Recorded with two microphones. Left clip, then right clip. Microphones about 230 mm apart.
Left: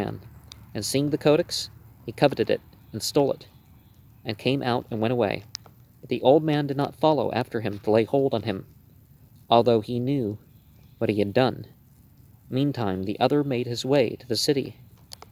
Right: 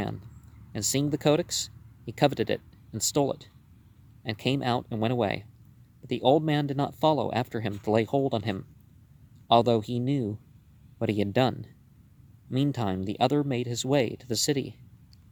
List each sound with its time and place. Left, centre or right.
0.7 s speech: right